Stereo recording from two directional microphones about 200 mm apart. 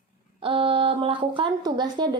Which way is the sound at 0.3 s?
25° right (ahead or behind).